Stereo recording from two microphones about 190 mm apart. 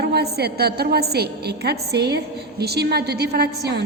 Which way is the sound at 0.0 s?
55° right (ahead or behind).